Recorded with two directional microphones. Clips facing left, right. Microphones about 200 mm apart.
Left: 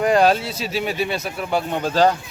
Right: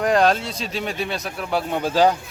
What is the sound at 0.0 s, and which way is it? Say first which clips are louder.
Speech: left 2 dB; centre (ahead or behind).